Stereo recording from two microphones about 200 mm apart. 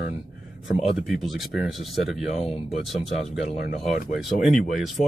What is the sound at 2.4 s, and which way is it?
Speech, 30° left (ahead or behind).